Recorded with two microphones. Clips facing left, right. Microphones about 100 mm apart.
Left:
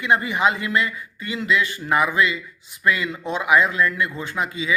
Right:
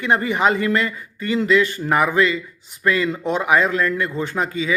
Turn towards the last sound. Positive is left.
turn(degrees=-35)  # may be behind; listen again after turning